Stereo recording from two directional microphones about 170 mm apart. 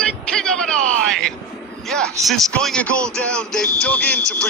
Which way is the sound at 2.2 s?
Centre (ahead or behind).